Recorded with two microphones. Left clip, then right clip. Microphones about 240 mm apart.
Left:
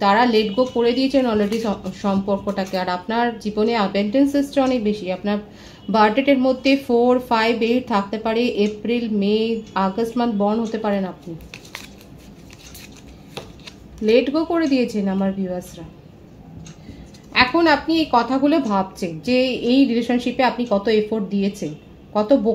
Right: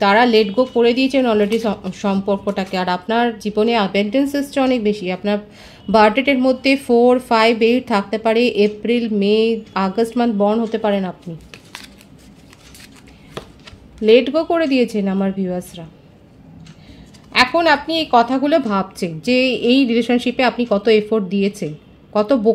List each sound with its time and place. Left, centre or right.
0.0 s speech: right
14.0 s speech: right
17.3 s speech: right